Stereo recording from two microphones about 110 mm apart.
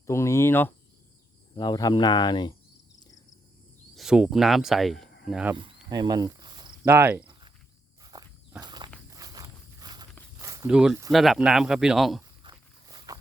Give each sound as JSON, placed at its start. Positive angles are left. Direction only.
{"t": 0.1, "sound": "cricket", "side_deg": 25}
{"t": 1.5, "sound": "speech", "side_deg": 40}
{"t": 3.9, "sound": "speech", "side_deg": -5}
{"t": 5.5, "sound": "cricket", "side_deg": -45}
{"t": 6.8, "sound": "speech", "side_deg": -20}
{"t": 8.0, "sound": "walk", "side_deg": -35}
{"t": 10.7, "sound": "speech", "side_deg": -5}
{"t": 12.4, "sound": "walk", "side_deg": -40}